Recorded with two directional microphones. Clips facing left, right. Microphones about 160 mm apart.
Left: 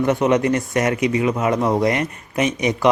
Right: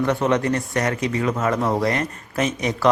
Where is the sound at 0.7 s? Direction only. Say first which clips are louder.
Left 4 dB; 20° left (ahead or behind).